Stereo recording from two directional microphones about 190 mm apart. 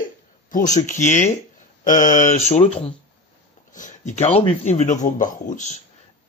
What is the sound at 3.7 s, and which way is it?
Speech, 40° left (ahead or behind).